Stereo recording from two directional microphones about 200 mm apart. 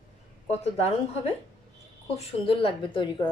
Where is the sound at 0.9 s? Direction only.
30° left (ahead or behind).